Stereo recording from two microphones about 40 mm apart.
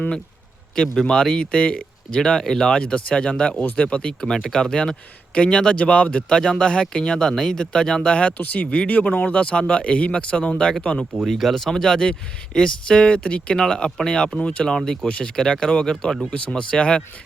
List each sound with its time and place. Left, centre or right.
0.8 s speech: centre
4.4 s speech: centre
4.7 s speech: left
8.1 s speech: left
8.6 s speech: left
8.9 s speech: left; by 11.2 s centre
11.3 s speech: centre; by 15.3 s left
15.6 s speech: centre
16.3 s speech: left